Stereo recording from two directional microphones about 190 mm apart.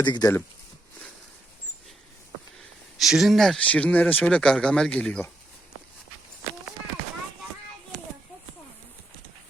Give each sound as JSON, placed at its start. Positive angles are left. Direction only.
{"t": 0.0, "sound": "speech", "side_deg": 25}
{"t": 3.0, "sound": "speech", "side_deg": 0}